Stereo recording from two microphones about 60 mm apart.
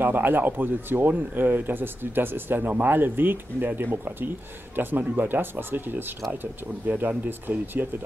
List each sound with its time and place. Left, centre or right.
0.0 s speech: right